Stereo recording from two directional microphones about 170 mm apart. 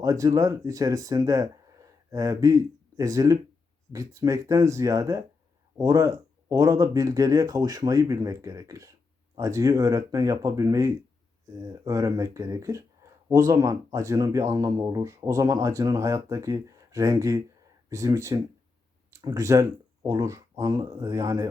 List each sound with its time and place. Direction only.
0.0 s speech: 20° right (ahead or behind)